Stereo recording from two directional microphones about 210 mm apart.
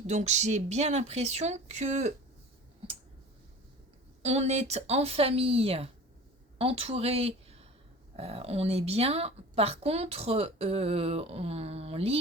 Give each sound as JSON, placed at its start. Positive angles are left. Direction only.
{"t": 0.1, "sound": "speech", "side_deg": -35}
{"t": 4.2, "sound": "a woman's voice", "side_deg": -30}